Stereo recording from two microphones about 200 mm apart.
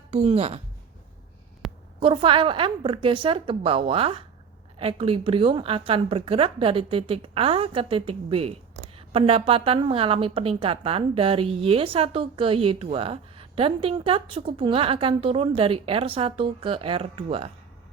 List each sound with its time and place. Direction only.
0.1 s a woman's voice: 30° right (ahead or behind)
1.6 s a sound: centre (ahead or behind)
2.0 s a woman's voice: 25° right (ahead or behind)